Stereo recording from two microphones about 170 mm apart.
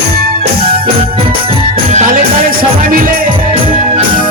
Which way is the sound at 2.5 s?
55° right (ahead or behind).